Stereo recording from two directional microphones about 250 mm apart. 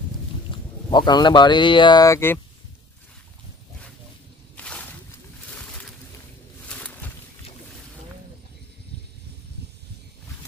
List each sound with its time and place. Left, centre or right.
0.5 s speech: centre
4.6 s slosh: centre
5.5 s a sound: centre